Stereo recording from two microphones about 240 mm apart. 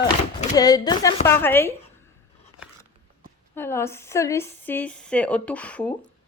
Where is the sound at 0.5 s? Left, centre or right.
Centre.